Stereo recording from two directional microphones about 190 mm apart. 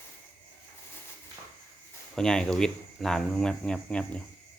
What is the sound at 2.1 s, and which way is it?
Speech, 5° left (ahead or behind).